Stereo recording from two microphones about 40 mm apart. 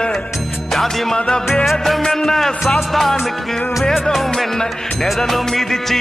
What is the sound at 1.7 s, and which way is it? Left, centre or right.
Music, centre.